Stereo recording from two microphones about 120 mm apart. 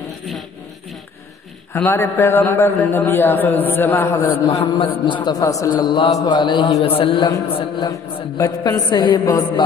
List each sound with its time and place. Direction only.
1.9 s a man's voice: 20° left (ahead or behind)
4.7 s a man's voice: 50° left (ahead or behind)
7.8 s a man's voice: 30° left (ahead or behind)